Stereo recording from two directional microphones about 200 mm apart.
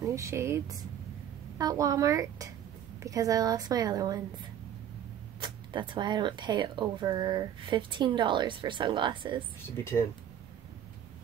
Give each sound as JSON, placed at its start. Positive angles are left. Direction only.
{"t": 0.0, "sound": "a woman's voice", "side_deg": -15}
{"t": 5.4, "sound": "speech", "side_deg": -25}